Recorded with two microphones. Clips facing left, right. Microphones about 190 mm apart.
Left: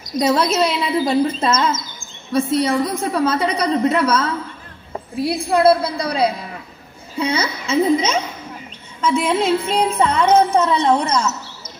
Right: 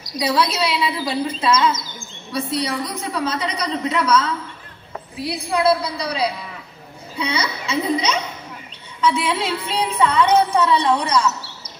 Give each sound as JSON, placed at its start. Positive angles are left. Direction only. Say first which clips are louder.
{"t": 0.0, "sound": "speech", "louder": "left 3 dB", "side_deg": 50}